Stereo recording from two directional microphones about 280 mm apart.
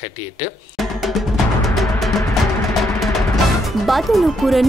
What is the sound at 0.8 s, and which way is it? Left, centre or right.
Music, centre.